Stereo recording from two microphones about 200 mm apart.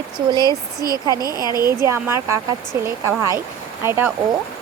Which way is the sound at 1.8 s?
15° right (ahead or behind).